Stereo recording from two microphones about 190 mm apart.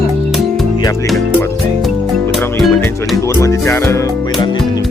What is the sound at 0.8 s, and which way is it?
Speech, 20° left (ahead or behind).